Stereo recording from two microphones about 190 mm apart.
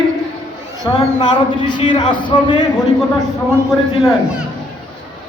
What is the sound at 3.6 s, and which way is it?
Speech, centre (ahead or behind).